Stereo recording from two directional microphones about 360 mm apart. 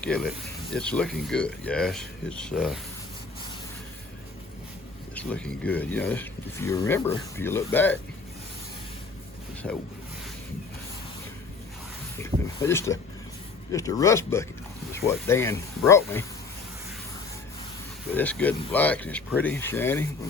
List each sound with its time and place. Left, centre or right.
0.0 s speech: centre
5.1 s speech: centre
12.5 s speech: centre
18.1 s speech: centre